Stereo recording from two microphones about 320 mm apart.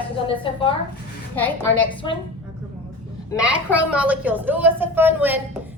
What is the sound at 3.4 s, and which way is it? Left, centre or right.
A woman's voice, centre.